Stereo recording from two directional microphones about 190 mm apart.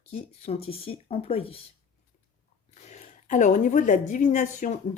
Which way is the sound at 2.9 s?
40° left (ahead or behind).